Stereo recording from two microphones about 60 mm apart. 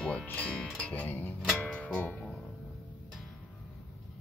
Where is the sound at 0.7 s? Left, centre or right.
Left.